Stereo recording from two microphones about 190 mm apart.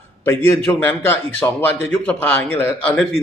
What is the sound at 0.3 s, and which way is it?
A man's voice, 15° left (ahead or behind).